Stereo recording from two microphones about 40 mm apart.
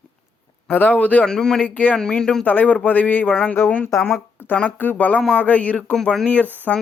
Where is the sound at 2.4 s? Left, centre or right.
Left.